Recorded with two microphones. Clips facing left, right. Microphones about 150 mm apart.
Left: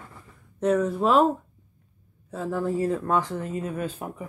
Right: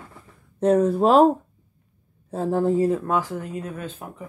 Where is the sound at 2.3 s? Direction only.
30° right (ahead or behind).